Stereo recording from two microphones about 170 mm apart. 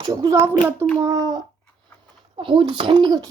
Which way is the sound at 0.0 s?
25° right (ahead or behind).